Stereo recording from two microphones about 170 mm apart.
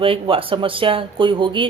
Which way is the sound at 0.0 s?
30° right (ahead or behind).